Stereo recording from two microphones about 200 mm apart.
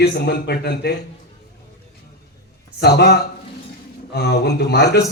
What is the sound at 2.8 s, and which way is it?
A man's voice, 55° left (ahead or behind).